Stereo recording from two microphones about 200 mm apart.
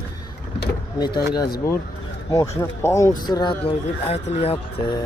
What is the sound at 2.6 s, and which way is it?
Speech, 15° left (ahead or behind).